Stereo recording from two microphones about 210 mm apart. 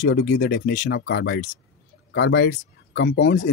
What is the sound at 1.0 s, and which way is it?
Speech, 55° left (ahead or behind).